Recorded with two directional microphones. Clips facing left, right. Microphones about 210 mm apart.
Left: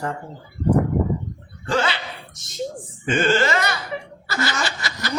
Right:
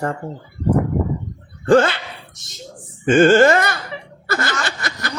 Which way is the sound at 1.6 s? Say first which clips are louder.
Right 9 dB; 50° right (ahead or behind).